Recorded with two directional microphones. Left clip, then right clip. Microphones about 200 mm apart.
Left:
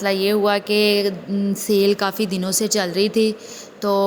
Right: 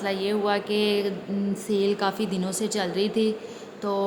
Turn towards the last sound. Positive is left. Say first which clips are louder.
# left 8 dB
turn(degrees=25)  # may be behind; listen again after turning